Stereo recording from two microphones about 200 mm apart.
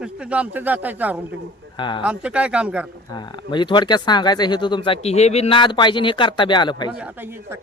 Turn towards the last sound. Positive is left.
turn(degrees=-10)  # may be behind; listen again after turning